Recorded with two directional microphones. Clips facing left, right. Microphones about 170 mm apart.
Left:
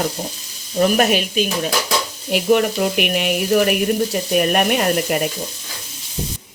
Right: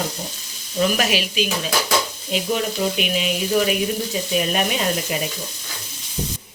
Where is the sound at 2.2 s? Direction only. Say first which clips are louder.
Left 11 dB; 60° left (ahead or behind).